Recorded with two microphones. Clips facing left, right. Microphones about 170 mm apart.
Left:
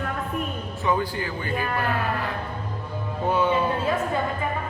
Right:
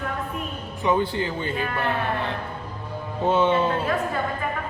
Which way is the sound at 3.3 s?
25° right (ahead or behind).